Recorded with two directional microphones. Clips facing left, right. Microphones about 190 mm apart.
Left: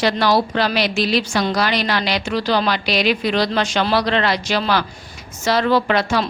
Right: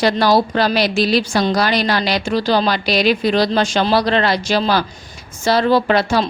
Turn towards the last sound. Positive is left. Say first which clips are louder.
# right 3 dB
turn(degrees=-35)  # may be behind; listen again after turning